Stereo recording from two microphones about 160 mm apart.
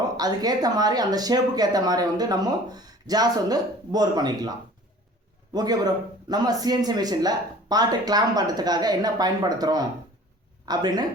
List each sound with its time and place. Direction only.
0.2 s speech: 25° right (ahead or behind)
5.5 s speech: 25° right (ahead or behind)